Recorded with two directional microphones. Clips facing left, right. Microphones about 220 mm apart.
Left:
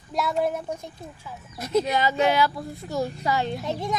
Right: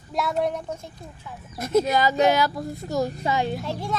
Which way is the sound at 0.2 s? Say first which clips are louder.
Even; centre (ahead or behind).